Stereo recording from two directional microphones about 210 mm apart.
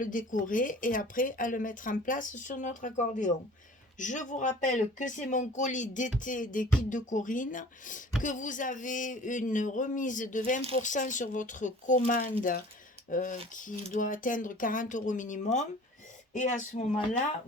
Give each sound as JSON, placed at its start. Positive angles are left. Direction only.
{"t": 0.0, "sound": "speech", "side_deg": 40}